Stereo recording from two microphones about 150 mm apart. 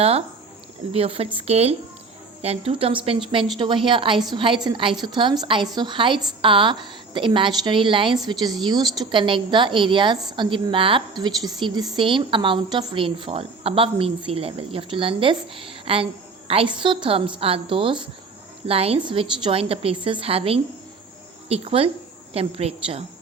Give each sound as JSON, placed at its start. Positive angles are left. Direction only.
{"t": 0.0, "sound": "a woman's voice", "side_deg": -40}